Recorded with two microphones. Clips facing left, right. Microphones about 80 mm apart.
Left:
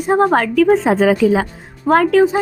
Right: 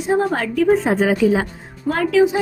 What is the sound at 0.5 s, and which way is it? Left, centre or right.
Speech, left.